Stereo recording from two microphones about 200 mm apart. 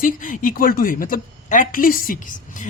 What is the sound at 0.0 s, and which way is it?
Speech, 40° left (ahead or behind).